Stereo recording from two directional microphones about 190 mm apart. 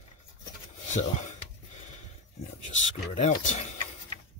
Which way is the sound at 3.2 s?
40° left (ahead or behind).